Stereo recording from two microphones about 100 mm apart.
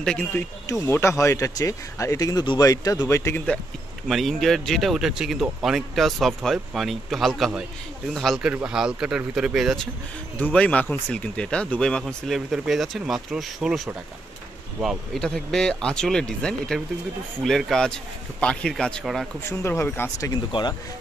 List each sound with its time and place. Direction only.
0.0 s speech: 10° left (ahead or behind)
0.3 s speech: 30° left (ahead or behind)
4.1 s speech: centre (ahead or behind)
8.6 s speech: 10° right (ahead or behind)
10.4 s speech: 10° left (ahead or behind)
15.1 s speech: 5° left (ahead or behind)
19.6 s speech: 25° left (ahead or behind)